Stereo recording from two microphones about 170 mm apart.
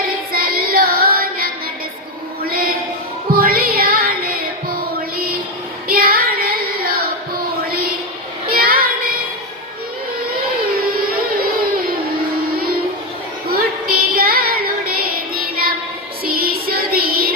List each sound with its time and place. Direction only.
0.3 s child singing: 60° right (ahead or behind)
2.4 s a sound: 60° right (ahead or behind)
3.3 s music: 60° right (ahead or behind)
5.1 s a sound: 60° right (ahead or behind)
5.9 s child singing: 60° right (ahead or behind)
11.3 s a sound: 60° right (ahead or behind)
12.5 s child singing: 60° right (ahead or behind)
13.9 s child singing: 60° right (ahead or behind)
16.2 s music: 60° right (ahead or behind)